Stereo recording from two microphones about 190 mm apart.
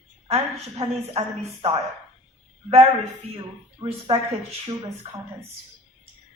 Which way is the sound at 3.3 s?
35° right (ahead or behind).